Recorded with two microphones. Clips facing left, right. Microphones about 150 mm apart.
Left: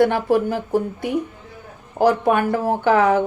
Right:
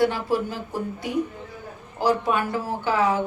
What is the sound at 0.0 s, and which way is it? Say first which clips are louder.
Speech: left 6 dB; 55° left (ahead or behind).